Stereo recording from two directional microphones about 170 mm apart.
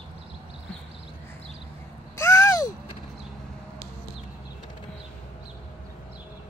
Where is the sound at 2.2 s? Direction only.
15° left (ahead or behind).